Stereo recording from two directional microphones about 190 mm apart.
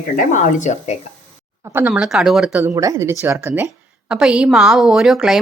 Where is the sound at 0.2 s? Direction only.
40° left (ahead or behind).